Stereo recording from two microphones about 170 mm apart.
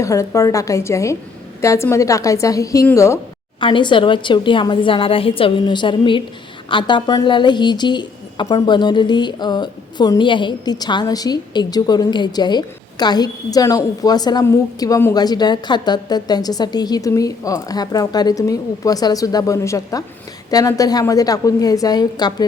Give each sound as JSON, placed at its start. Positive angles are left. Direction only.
{"t": 0.0, "sound": "a woman's voice", "side_deg": 20}
{"t": 3.6, "sound": "a woman's voice", "side_deg": 30}